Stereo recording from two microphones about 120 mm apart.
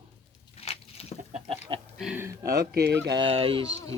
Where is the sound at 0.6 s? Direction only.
60° left (ahead or behind).